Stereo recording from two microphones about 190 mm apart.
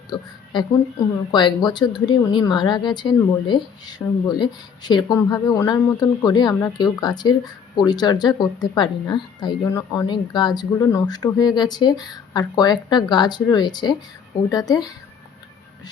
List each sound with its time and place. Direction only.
0.1 s speech: 20° left (ahead or behind)